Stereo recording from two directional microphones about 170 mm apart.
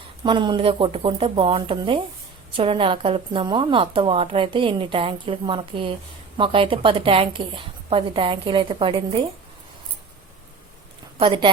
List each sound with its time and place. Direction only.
0.2 s a woman's voice: 30° right (ahead or behind)
11.2 s a woman's voice: 30° right (ahead or behind)